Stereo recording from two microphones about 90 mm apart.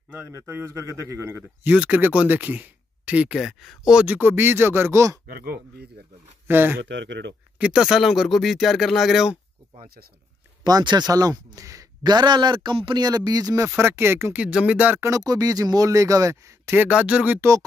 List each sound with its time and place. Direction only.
0.3 s speech: 30° right (ahead or behind)
1.7 s speech: 15° right (ahead or behind)
3.3 s speech: centre (ahead or behind)
4.0 s speech: 20° right (ahead or behind)
6.4 s speech: 25° right (ahead or behind)
7.5 s speech: 10° right (ahead or behind)
10.6 s speech: 55° right (ahead or behind); by 11.8 s 40° right (ahead or behind)
12.0 s a man's voice: 55° right (ahead or behind)
13.7 s speech: 25° right (ahead or behind)
14.4 s speech: 15° right (ahead or behind)
15.0 s speech: 40° right (ahead or behind)
16.9 s speech: 15° right (ahead or behind)
17.4 s speech: 35° right (ahead or behind)